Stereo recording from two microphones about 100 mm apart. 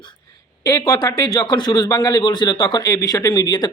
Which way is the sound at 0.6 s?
35° left (ahead or behind).